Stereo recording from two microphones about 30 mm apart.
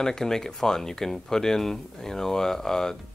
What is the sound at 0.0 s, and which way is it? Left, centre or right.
Speech, centre.